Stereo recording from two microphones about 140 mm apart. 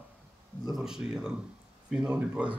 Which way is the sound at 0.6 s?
5° right (ahead or behind).